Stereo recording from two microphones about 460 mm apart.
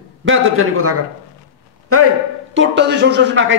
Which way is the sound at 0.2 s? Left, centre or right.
Right.